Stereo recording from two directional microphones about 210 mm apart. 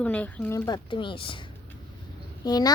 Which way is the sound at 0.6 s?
20° left (ahead or behind).